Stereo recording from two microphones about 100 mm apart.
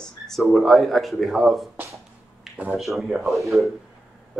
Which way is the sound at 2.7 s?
Centre (ahead or behind).